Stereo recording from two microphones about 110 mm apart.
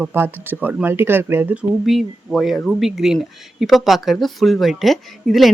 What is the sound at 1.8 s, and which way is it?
Speech, centre (ahead or behind).